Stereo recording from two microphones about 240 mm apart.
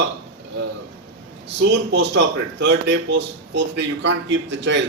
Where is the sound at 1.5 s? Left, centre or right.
Right.